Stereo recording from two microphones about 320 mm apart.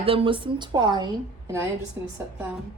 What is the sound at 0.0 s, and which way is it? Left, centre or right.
A woman's voice, centre.